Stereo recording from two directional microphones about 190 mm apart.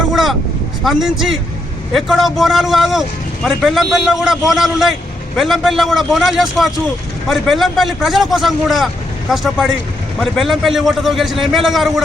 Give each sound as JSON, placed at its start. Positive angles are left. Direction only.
{"t": 0.1, "sound": "vehicle", "side_deg": 0}
{"t": 0.9, "sound": "a man's voice", "side_deg": 0}